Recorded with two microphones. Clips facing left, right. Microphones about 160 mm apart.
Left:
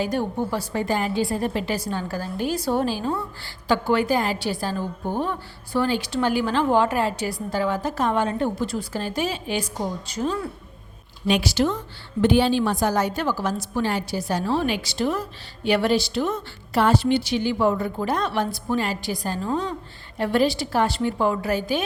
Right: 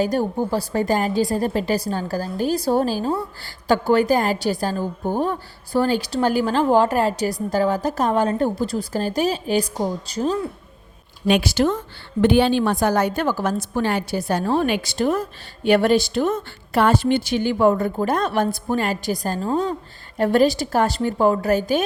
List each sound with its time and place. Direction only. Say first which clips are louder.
0.0 s a woman's voice: right 4 dB; 40° right (ahead or behind)
11.3 s a woman's voice: right 3 dB; 55° right (ahead or behind)